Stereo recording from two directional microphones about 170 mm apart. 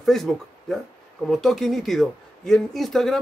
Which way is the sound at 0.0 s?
Centre (ahead or behind).